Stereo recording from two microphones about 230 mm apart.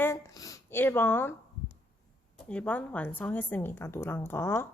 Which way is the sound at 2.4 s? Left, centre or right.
Centre.